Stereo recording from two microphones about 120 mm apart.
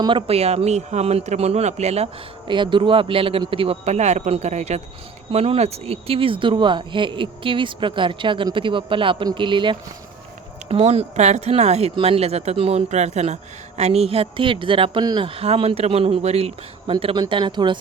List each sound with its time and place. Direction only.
0.0 s a man's voice: 45° right (ahead or behind); by 2.0 s 65° right (ahead or behind)
2.5 s speech: 40° right (ahead or behind)
10.7 s a man's voice: 55° right (ahead or behind)